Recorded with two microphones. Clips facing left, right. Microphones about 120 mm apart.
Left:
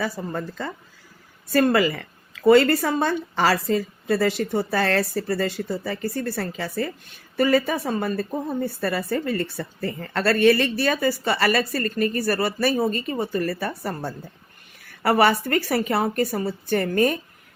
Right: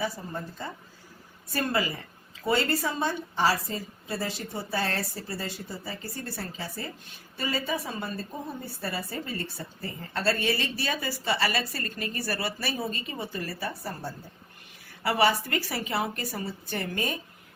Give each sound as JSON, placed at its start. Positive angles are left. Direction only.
{"t": 0.0, "sound": "speech", "side_deg": 90}
{"t": 1.5, "sound": "a woman's voice", "side_deg": 75}